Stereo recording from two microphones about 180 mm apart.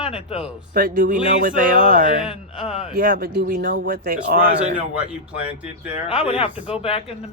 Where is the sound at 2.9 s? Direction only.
50° right (ahead or behind).